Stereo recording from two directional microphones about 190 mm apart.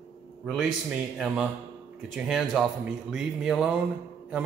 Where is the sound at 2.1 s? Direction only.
Centre (ahead or behind).